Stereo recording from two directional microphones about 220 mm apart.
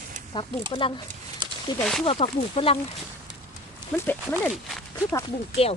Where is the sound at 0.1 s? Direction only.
35° right (ahead or behind).